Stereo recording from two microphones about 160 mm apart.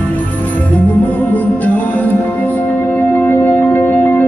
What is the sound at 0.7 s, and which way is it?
Music, 10° left (ahead or behind).